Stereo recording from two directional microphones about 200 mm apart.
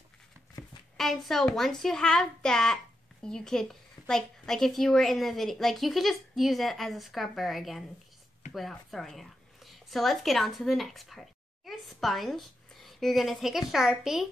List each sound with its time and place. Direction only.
0.6 s shuffling cards: 15° left (ahead or behind)
0.9 s a child's voice: centre (ahead or behind)